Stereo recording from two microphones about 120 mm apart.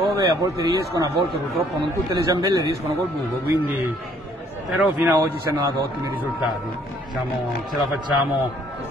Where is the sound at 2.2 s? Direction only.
30° right (ahead or behind).